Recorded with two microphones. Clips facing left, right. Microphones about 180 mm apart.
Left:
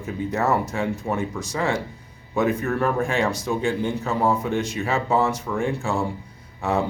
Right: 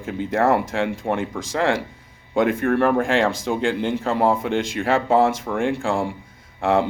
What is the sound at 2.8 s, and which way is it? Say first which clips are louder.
Speech: right 1 dB; 85° right.